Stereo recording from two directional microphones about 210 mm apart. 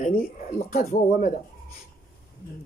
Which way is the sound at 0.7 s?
40° left (ahead or behind).